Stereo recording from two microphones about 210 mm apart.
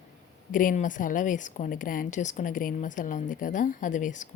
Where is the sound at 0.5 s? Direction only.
40° left (ahead or behind).